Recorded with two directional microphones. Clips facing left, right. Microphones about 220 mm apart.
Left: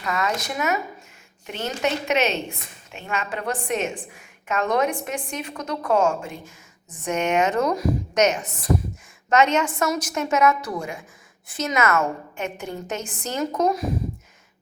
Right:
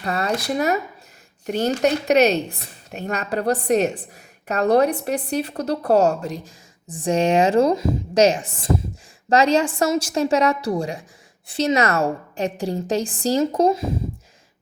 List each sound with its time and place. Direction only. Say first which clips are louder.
0.0 s a woman's voice: right 3 dB; 35° right (ahead or behind)